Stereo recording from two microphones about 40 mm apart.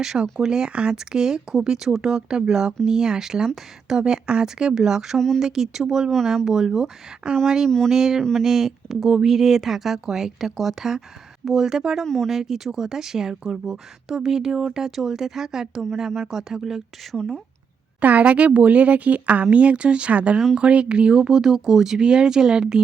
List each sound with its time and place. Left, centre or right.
0.0 s speech: centre
6.1 s speech: centre
6.4 s speech: centre
7.2 s speech: right
12.0 s speech: centre
12.3 s speech: centre
18.0 s speech: right; by 22.8 s centre